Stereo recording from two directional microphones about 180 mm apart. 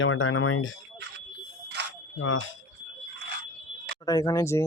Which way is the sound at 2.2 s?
90° left.